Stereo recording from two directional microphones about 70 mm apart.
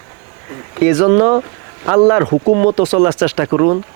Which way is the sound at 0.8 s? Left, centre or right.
Right.